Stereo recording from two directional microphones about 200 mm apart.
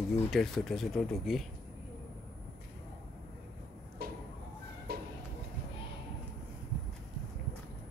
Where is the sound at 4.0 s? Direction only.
50° right (ahead or behind).